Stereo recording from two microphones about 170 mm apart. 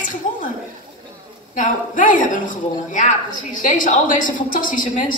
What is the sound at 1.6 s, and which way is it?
A woman's voice, 50° left (ahead or behind).